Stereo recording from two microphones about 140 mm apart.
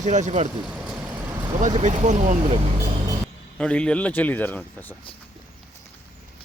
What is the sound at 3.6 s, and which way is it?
Speech, 5° left (ahead or behind).